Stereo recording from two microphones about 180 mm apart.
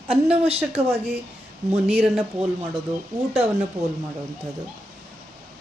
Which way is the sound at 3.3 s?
35° right (ahead or behind).